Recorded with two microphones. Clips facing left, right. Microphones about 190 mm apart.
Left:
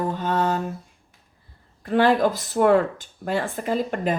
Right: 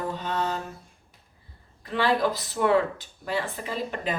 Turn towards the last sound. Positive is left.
turn(degrees=50)  # may be behind; listen again after turning